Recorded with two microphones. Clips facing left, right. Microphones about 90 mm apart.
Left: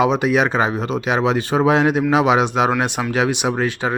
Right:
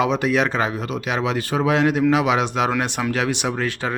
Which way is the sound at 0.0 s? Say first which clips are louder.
Left 3 dB; 20° left (ahead or behind).